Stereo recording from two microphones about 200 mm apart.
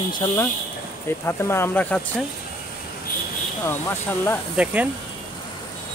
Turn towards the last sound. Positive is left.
turn(degrees=-5)  # may be behind; listen again after turning